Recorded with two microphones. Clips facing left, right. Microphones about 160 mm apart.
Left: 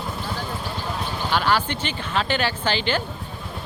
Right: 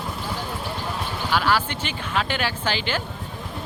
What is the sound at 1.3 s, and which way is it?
Speech, 5° right (ahead or behind).